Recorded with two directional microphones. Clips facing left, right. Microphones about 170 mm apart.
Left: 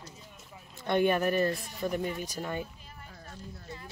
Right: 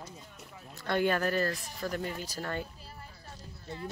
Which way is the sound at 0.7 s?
20° left (ahead or behind).